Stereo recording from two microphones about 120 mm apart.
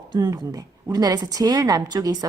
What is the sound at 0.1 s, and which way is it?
A woman's voice, 35° right (ahead or behind).